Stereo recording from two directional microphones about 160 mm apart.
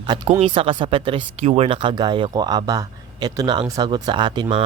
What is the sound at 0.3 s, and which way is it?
Speech, 40° right (ahead or behind).